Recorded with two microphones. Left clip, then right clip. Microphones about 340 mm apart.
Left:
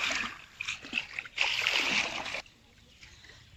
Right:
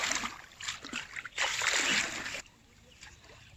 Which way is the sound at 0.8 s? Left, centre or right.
Centre.